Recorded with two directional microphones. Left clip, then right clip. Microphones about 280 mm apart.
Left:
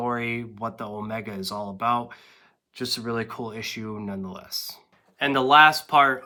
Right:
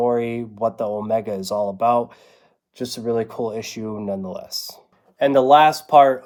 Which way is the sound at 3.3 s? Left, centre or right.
Left.